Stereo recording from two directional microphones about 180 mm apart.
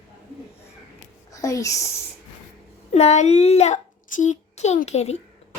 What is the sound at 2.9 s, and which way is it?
A child's voice, 40° left (ahead or behind).